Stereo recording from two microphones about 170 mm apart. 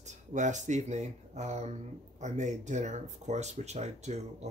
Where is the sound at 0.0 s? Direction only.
45° right (ahead or behind).